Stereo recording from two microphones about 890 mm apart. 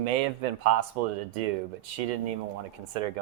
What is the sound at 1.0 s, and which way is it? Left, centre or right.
Speech, right.